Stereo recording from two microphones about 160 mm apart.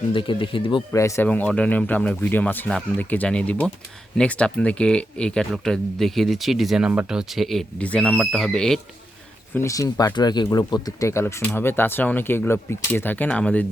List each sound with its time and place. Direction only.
0.1 s speech: 30° left (ahead or behind)
0.9 s speech: 20° left (ahead or behind)
9.6 s speech: 20° left (ahead or behind)